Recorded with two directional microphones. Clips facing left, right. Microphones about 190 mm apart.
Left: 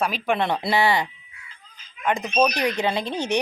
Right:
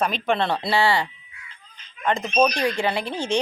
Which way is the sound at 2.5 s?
20° left (ahead or behind).